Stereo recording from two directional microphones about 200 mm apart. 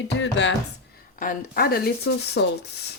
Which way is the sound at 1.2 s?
45° left (ahead or behind).